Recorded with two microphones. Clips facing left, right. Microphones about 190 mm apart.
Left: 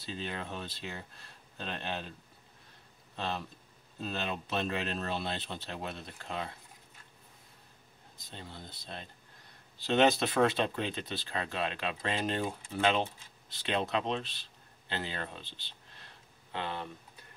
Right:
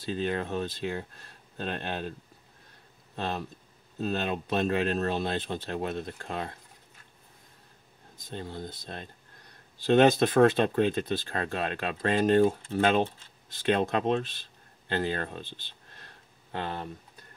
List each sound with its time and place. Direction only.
0.0 s speech: 50° right (ahead or behind)
3.2 s speech: 50° right (ahead or behind)
8.3 s speech: 45° right (ahead or behind)